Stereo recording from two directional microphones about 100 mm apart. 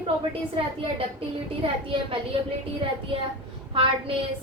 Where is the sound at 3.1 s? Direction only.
60° right (ahead or behind).